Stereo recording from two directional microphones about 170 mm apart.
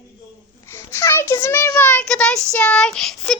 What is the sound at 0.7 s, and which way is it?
Child singing, 15° left (ahead or behind).